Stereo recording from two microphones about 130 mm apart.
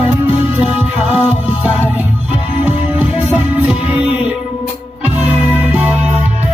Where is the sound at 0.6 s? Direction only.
10° right (ahead or behind).